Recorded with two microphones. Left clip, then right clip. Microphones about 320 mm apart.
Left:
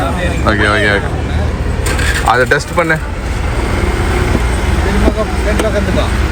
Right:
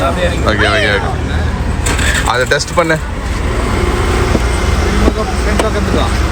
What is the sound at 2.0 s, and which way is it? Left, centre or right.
Vehicle, right.